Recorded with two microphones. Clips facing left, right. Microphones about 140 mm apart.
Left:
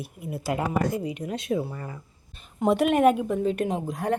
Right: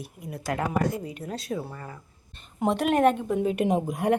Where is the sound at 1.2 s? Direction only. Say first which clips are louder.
Left 3 dB; 15° left (ahead or behind).